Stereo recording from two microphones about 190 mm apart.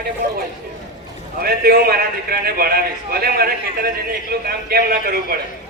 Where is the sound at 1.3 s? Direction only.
55° right (ahead or behind).